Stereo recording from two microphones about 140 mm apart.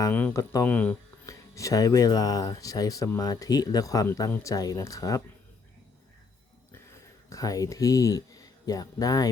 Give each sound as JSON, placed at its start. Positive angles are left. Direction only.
{"t": 0.1, "sound": "speech", "side_deg": 10}
{"t": 1.3, "sound": "speech", "side_deg": 20}
{"t": 6.7, "sound": "speech", "side_deg": 20}